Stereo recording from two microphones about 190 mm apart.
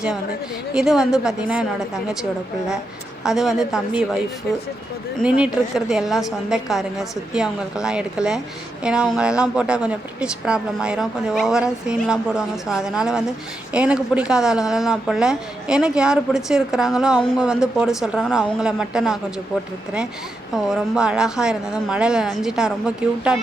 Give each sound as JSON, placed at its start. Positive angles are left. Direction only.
{"t": 0.7, "sound": "speech", "side_deg": -5}
{"t": 3.2, "sound": "speech", "side_deg": 0}
{"t": 5.2, "sound": "speech", "side_deg": -5}
{"t": 20.7, "sound": "speech", "side_deg": -5}